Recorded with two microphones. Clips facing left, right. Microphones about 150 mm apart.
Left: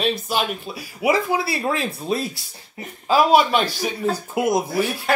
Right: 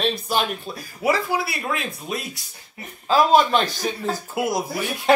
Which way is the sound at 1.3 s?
30° left (ahead or behind).